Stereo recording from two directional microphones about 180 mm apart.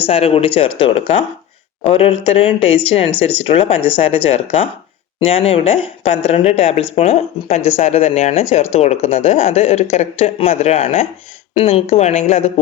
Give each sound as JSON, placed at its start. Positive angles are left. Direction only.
{"t": 0.1, "sound": "speech", "side_deg": 35}